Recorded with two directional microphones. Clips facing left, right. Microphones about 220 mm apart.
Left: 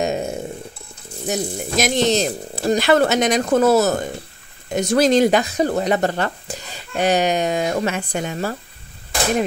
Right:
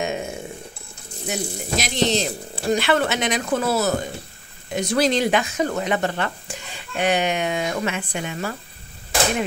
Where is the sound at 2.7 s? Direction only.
40° left (ahead or behind).